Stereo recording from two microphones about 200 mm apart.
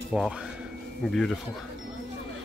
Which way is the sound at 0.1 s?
Centre (ahead or behind).